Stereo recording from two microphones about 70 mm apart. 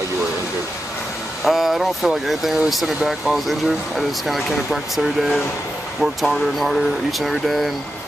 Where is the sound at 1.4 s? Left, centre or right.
Centre.